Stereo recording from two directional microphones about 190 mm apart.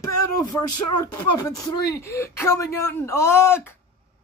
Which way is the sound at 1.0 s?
20° left (ahead or behind).